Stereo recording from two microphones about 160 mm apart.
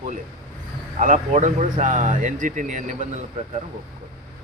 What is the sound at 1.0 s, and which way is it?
Speech, 50° right (ahead or behind).